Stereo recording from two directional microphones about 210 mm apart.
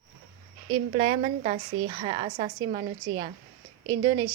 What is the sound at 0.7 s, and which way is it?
A woman's voice, 30° right (ahead or behind).